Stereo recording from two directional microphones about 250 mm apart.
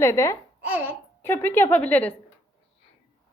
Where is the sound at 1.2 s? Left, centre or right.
Centre.